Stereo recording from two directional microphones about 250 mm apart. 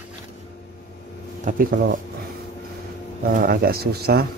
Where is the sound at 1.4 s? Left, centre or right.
Right.